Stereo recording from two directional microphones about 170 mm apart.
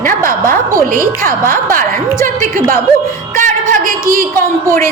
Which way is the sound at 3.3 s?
50° right (ahead or behind).